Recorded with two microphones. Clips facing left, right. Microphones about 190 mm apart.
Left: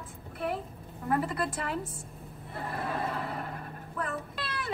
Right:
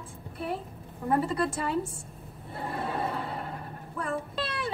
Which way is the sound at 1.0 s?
30° right (ahead or behind).